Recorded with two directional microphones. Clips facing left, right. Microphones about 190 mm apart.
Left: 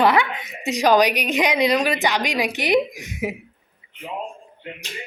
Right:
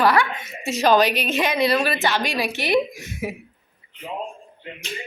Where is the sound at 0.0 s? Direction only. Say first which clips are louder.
Left 1 dB; 20° left (ahead or behind).